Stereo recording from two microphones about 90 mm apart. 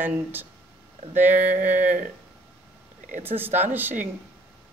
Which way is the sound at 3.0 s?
20° right (ahead or behind).